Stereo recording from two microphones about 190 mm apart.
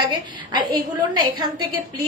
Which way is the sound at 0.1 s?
20° right (ahead or behind).